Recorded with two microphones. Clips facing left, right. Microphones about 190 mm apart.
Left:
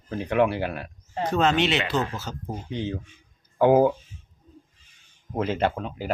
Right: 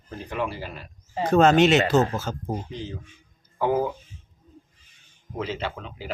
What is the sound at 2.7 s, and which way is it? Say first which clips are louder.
Speech: left 5 dB; 65° left (ahead or behind).